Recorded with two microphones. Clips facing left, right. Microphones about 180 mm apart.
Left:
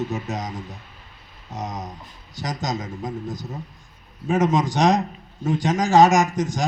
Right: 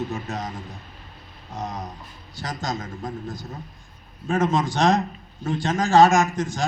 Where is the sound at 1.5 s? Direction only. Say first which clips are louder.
Left 1 dB; 20° left (ahead or behind).